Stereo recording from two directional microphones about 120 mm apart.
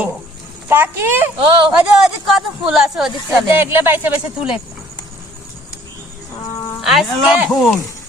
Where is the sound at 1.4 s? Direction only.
45° right (ahead or behind).